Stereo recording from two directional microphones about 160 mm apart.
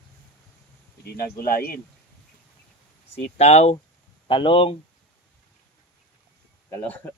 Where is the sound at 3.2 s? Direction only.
45° left (ahead or behind).